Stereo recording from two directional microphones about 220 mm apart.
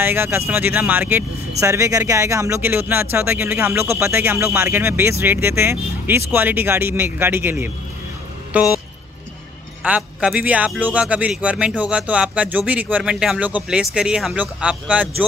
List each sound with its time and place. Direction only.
0.0 s speech: 10° right (ahead or behind)
9.8 s a man's voice: 5° right (ahead or behind)